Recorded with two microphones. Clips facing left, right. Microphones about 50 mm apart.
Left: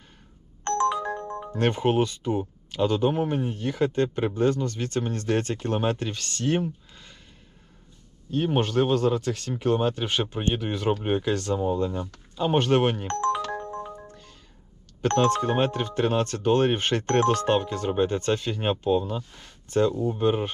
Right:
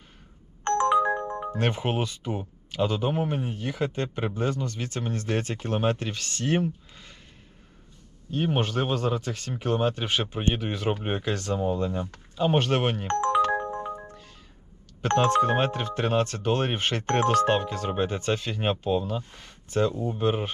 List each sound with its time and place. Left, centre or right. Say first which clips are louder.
0.6 s ringtone: right 3 dB; right
1.5 s speech: left 6 dB; centre
8.3 s speech: left 2 dB; centre
11.9 s speech: right 1 dB; right
12.4 s speech: left 2 dB; centre
13.1 s ringtone: right 3 dB; right
14.1 s music: right 1 dB; centre
15.0 s speech: right 1 dB; centre
19.9 s speech: left 4 dB; centre
20.1 s speech: left 2 dB; centre